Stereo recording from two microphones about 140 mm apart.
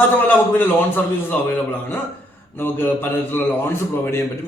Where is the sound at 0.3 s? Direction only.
15° left (ahead or behind).